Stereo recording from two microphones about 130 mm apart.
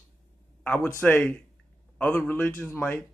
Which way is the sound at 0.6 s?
15° left (ahead or behind).